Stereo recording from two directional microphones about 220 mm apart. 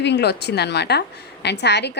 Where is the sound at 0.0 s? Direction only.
50° left (ahead or behind).